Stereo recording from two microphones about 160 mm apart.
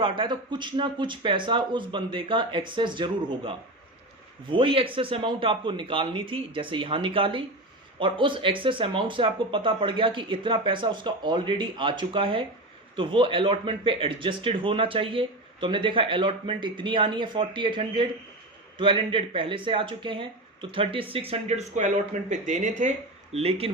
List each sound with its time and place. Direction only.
0.0 s speech: 30° right (ahead or behind)
4.5 s speech: 35° right (ahead or behind); by 22.9 s 50° right (ahead or behind)
23.3 s speech: 40° right (ahead or behind)